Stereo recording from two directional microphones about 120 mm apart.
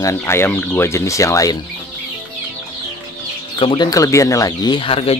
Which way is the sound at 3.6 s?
50° left (ahead or behind).